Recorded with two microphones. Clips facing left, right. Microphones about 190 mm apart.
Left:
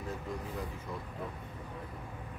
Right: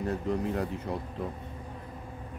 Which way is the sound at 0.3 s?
65° right (ahead or behind).